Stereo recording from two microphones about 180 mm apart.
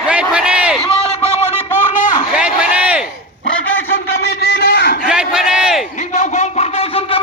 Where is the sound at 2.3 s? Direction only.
5° right (ahead or behind).